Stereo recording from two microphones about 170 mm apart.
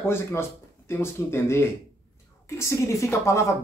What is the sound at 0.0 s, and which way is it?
Speech, 15° left (ahead or behind).